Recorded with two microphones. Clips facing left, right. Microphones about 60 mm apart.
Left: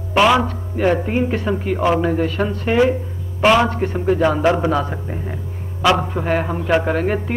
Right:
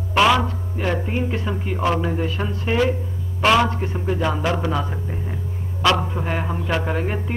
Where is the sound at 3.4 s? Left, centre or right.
Centre.